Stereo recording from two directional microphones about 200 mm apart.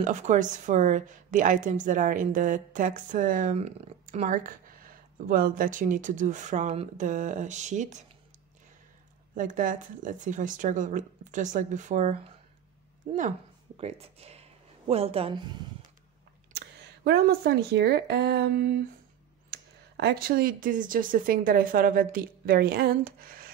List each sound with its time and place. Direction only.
0.0 s a woman's voice: 40° right (ahead or behind)
9.3 s a woman's voice: 40° right (ahead or behind)
13.7 s speech: 30° right (ahead or behind)
16.5 s speech: 55° right (ahead or behind)
20.0 s speech: 50° right (ahead or behind)